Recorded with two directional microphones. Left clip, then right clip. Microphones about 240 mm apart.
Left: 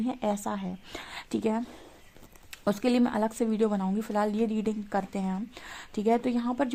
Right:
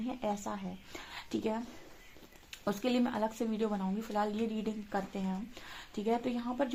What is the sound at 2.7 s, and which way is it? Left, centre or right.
A woman's voice, left.